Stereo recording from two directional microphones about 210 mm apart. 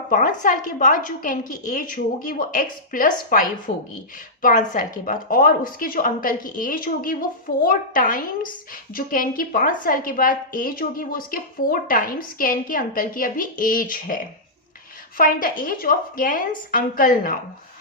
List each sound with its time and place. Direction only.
0.1 s a woman's voice: 40° left (ahead or behind)
15.2 s a woman's voice: 40° left (ahead or behind)